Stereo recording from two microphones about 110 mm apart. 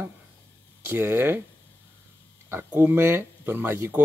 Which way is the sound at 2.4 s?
20° right (ahead or behind).